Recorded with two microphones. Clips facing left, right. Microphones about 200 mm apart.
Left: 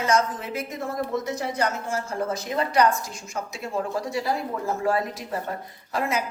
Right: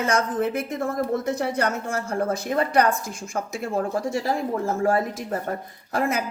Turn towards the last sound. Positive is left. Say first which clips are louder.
# right 2 dB
turn(degrees=-50)  # may be behind; listen again after turning